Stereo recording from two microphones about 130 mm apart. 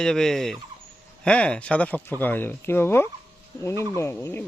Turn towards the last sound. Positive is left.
turn(degrees=20)  # may be behind; listen again after turning